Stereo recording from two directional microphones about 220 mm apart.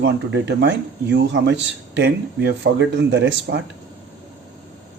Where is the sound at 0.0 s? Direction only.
50° right (ahead or behind).